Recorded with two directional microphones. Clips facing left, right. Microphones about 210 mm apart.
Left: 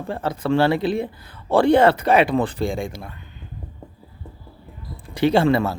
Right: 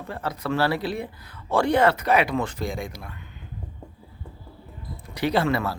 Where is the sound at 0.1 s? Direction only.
25° left (ahead or behind).